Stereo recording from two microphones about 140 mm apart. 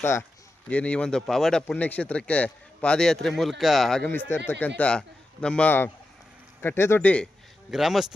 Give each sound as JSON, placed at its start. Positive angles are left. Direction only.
{"t": 0.0, "sound": "speech", "side_deg": 20}
{"t": 0.7, "sound": "speech", "side_deg": 10}
{"t": 7.7, "sound": "speech", "side_deg": 0}